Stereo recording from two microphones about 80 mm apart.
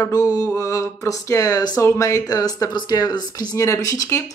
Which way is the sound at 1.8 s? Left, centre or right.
Left.